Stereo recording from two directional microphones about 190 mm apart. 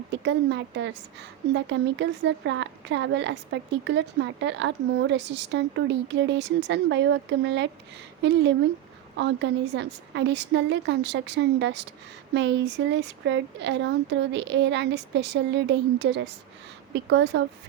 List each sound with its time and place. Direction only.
0.3 s a woman's voice: 70° right (ahead or behind)